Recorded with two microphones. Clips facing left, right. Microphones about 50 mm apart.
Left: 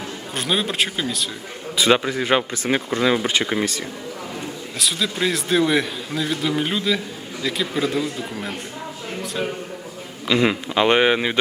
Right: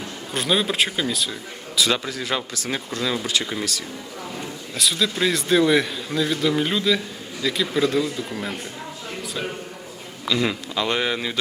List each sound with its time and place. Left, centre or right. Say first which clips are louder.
0.3 s a man's voice: right 1 dB; centre
1.7 s speech: left 5 dB; left
4.8 s a man's voice: right 1 dB; centre
10.2 s speech: left 4 dB; left